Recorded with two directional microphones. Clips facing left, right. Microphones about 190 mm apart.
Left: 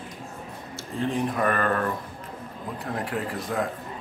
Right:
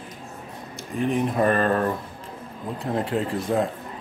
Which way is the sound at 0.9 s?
20° right (ahead or behind).